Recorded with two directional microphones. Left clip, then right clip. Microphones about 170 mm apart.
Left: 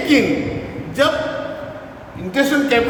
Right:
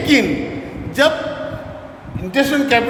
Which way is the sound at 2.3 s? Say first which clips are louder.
Right 1 dB; 55° right (ahead or behind).